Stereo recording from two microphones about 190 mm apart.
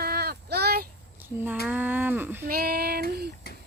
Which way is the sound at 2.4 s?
50° right (ahead or behind).